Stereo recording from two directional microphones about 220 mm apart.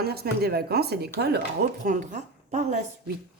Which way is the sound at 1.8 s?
35° right (ahead or behind).